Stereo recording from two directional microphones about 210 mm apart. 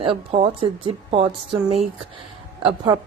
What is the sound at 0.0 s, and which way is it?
A woman's voice, 25° right (ahead or behind).